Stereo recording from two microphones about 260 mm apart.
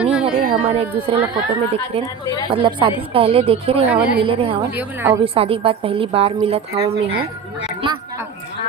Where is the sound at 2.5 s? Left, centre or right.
Centre.